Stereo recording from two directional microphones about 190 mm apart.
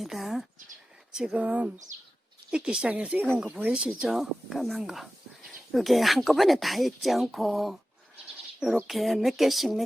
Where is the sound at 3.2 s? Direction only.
5° left (ahead or behind).